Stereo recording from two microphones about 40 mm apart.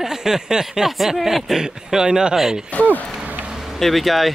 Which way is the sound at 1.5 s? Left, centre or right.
Centre.